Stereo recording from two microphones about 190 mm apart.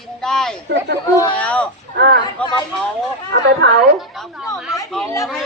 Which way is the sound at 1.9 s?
65° right (ahead or behind).